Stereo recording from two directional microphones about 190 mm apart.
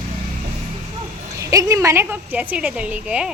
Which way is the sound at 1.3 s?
15° right (ahead or behind).